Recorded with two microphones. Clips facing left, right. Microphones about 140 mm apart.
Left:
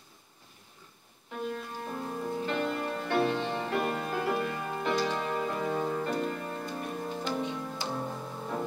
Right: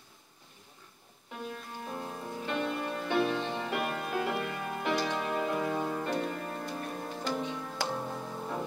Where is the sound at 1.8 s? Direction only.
5° right (ahead or behind).